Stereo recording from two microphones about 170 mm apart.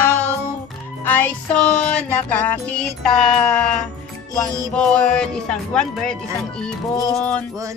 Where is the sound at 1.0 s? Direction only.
10° left (ahead or behind).